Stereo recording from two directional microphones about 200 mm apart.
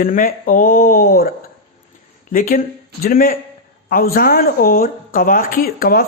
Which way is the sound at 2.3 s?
45° left (ahead or behind).